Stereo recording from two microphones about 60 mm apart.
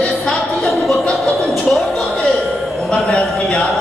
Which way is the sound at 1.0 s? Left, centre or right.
Centre.